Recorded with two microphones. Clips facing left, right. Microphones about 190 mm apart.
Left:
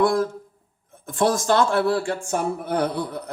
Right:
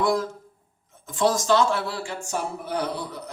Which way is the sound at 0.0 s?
55° left (ahead or behind).